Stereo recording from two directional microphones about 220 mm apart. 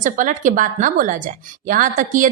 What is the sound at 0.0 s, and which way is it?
A woman's voice, 35° right (ahead or behind).